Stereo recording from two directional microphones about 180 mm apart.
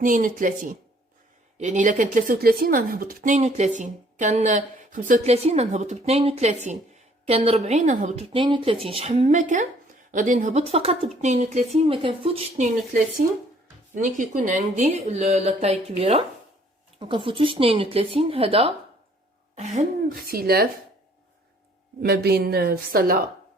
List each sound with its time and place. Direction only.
0.0 s speech: 45° right (ahead or behind); by 12.6 s 30° right (ahead or behind)
12.6 s speech: 45° right (ahead or behind)
20.1 s a woman's voice: 55° right (ahead or behind)
22.0 s a woman's voice: 60° right (ahead or behind)